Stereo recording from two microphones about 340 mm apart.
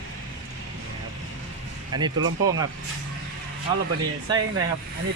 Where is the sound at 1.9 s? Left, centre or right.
Centre.